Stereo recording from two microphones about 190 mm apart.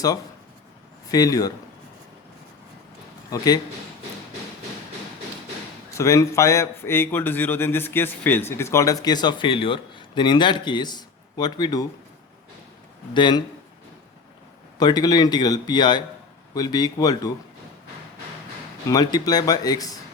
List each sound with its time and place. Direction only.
1.1 s a man's voice: 20° left (ahead or behind)
3.2 s a man's voice: 20° left (ahead or behind)
6.0 s speech: 15° left (ahead or behind)
13.1 s a man's voice: 25° left (ahead or behind)
14.8 s a man's voice: 20° left (ahead or behind)
18.9 s a man's voice: 20° left (ahead or behind)